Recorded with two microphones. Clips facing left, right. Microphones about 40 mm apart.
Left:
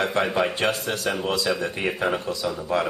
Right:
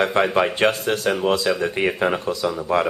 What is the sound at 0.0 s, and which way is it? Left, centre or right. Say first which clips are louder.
Speech: right 4 dB; right.